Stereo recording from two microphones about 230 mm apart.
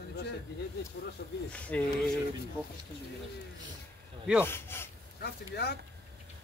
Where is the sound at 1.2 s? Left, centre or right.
Left.